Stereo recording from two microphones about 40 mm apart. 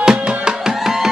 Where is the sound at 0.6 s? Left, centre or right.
Centre.